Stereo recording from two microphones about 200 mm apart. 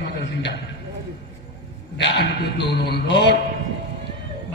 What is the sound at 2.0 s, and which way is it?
A man's voice, 60° left (ahead or behind).